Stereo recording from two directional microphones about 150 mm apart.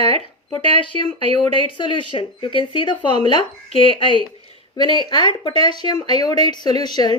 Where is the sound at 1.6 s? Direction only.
30° left (ahead or behind).